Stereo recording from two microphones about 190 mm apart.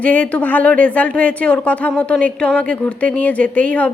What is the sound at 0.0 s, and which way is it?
A woman's voice, 10° left (ahead or behind).